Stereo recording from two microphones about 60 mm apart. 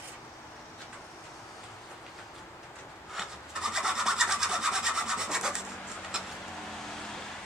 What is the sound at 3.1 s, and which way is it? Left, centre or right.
Rub, centre.